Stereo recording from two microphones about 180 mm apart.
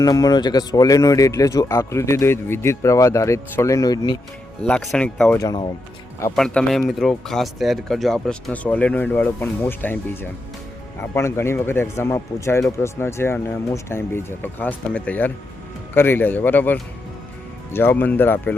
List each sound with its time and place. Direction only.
0.0 s speech: 20° left (ahead or behind)
4.6 s speech: centre (ahead or behind)
5.4 s speech: 20° left (ahead or behind)
6.3 s speech: 5° left (ahead or behind)